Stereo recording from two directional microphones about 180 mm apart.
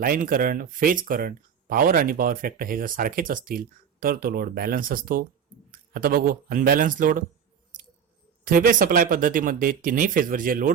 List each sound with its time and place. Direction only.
0.0 s speech: 50° right (ahead or behind)
8.4 s speech: 50° right (ahead or behind)